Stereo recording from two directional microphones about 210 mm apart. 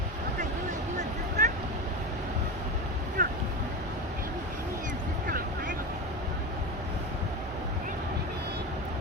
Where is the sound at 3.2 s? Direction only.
35° right (ahead or behind).